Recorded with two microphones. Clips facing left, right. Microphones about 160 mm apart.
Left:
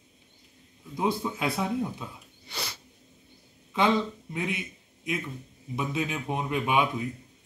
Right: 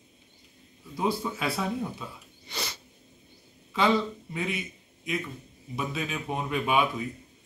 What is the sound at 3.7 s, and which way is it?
Speech, 20° left (ahead or behind).